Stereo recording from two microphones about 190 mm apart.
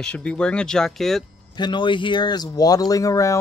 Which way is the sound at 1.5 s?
25° left (ahead or behind).